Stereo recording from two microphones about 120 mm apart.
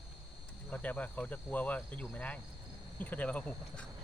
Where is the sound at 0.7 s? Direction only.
10° left (ahead or behind).